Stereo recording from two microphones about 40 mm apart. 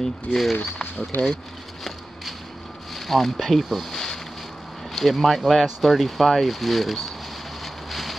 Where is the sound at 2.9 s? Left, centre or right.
Centre.